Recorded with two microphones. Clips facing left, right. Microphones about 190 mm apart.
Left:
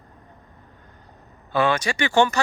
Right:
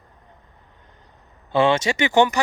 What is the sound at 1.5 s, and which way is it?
Speech, 25° right (ahead or behind).